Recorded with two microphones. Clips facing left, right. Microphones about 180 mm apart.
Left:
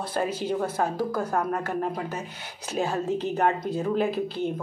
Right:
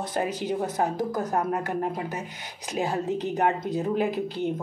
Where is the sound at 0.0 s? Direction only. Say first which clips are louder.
Even; 15° right (ahead or behind).